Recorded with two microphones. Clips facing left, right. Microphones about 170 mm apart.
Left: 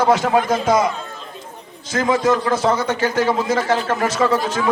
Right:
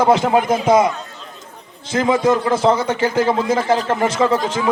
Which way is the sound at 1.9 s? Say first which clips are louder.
Right 2 dB; 25° right (ahead or behind).